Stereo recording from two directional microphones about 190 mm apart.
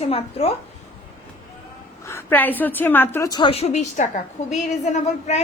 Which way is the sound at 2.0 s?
15° left (ahead or behind).